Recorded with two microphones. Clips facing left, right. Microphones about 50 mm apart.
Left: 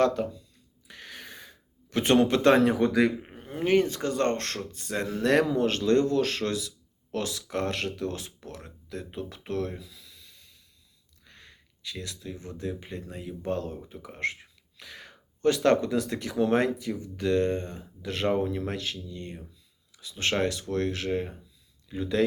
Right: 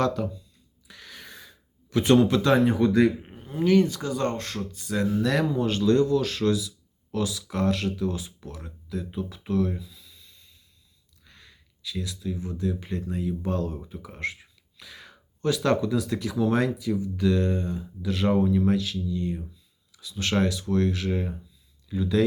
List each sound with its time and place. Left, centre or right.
0.0 s speech: left
0.9 s a sound: left
1.9 s a man's voice: left
9.7 s snort: left
11.3 s a sound: left
12.5 s speech: left
12.8 s speech: centre; by 19.4 s left
19.9 s a sound: left
20.4 s speech: left